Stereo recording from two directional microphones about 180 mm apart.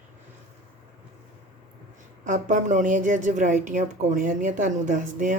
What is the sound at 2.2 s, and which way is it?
A woman's voice, 45° right (ahead or behind).